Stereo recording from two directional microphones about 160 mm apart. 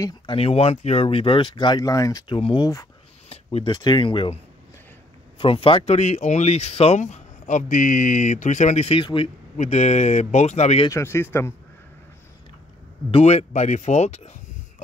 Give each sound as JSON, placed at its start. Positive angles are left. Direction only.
{"t": 0.4, "sound": "speech", "side_deg": 40}
{"t": 5.4, "sound": "speech", "side_deg": 35}
{"t": 9.6, "sound": "speech", "side_deg": 45}
{"t": 10.9, "sound": "speech", "side_deg": 15}
{"t": 13.1, "sound": "speech", "side_deg": 40}